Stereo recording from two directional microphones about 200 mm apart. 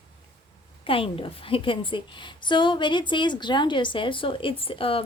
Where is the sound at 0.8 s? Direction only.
25° left (ahead or behind).